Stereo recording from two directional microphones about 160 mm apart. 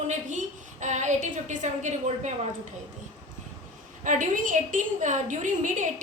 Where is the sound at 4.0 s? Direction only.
55° right (ahead or behind).